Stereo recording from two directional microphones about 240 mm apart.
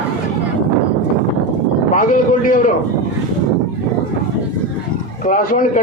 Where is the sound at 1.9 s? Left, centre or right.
Left.